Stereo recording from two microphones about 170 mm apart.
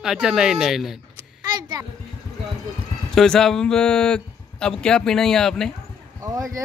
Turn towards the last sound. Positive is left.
turn(degrees=-20)  # may be behind; listen again after turning